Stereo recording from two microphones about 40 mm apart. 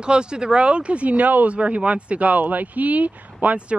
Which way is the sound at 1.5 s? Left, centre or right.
Right.